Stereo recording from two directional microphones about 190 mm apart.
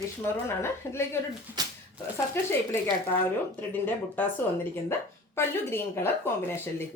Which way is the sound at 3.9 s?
10° left (ahead or behind).